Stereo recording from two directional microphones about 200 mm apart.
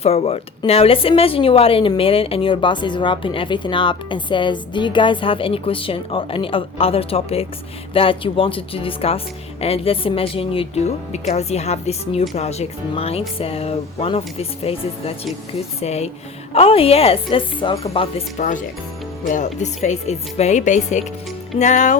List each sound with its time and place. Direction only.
0.0 s speech: 30° left (ahead or behind)
18.3 s speech: 40° left (ahead or behind)